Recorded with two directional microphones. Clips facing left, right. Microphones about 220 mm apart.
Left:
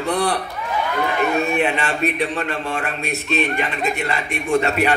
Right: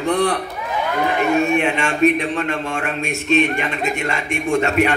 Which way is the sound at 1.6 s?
35° left (ahead or behind).